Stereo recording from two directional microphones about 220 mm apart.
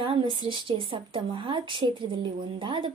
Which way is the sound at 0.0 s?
20° right (ahead or behind).